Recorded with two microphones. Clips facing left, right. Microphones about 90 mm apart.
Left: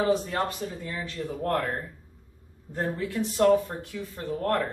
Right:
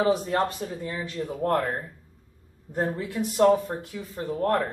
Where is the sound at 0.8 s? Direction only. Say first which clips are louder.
Right 2 dB; 20° right (ahead or behind).